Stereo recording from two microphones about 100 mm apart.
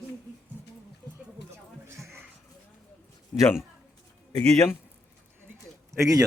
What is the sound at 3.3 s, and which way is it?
Speech, 5° left (ahead or behind).